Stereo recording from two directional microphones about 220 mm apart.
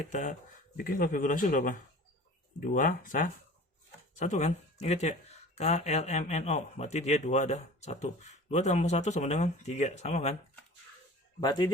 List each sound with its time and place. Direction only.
0.1 s a man's voice: 35° left (ahead or behind)
2.7 s a man's voice: 35° left (ahead or behind)
11.3 s speech: 20° left (ahead or behind)